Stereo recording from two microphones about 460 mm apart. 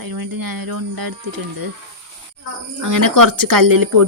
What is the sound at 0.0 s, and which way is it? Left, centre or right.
Speech, right.